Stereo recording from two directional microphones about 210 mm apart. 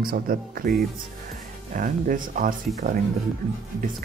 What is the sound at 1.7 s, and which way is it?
Speech, 40° right (ahead or behind).